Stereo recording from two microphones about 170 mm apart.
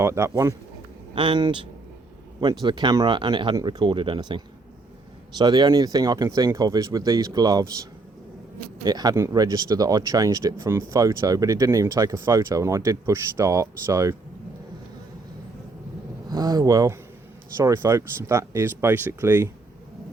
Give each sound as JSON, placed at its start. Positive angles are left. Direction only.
{"t": 0.0, "sound": "speech", "side_deg": -15}
{"t": 1.1, "sound": "speech", "side_deg": -30}
{"t": 8.8, "sound": "speech", "side_deg": -25}
{"t": 16.3, "sound": "speech", "side_deg": -25}